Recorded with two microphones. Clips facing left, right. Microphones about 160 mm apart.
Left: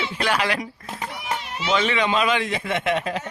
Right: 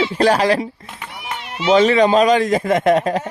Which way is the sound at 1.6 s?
40° right (ahead or behind).